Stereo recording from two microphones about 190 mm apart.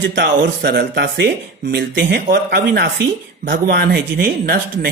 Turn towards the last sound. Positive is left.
turn(degrees=-55)  # may be behind; listen again after turning